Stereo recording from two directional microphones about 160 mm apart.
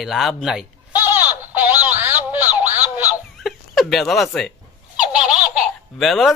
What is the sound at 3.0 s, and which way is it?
Fowl, 5° right (ahead or behind).